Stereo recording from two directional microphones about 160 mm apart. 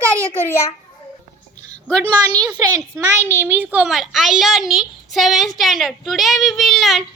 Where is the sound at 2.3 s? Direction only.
25° right (ahead or behind).